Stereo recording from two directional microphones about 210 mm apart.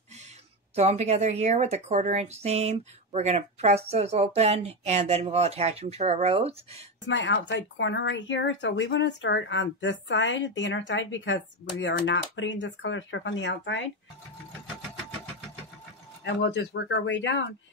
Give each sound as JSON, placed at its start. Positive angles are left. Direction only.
{"t": 0.7, "sound": "a woman's voice", "side_deg": -30}
{"t": 7.1, "sound": "speech", "side_deg": 60}
{"t": 16.3, "sound": "speech", "side_deg": 55}